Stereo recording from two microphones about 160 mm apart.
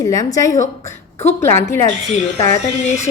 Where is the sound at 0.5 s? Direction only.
50° left (ahead or behind).